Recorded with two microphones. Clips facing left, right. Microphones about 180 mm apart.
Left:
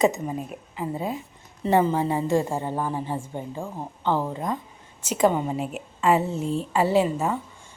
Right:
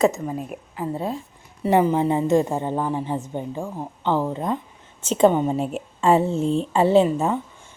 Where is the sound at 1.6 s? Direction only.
15° right (ahead or behind).